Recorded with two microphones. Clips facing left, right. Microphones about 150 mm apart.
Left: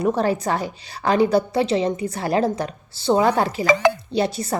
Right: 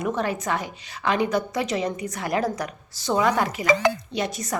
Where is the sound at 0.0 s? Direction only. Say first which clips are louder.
Left 6 dB; 35° left (ahead or behind).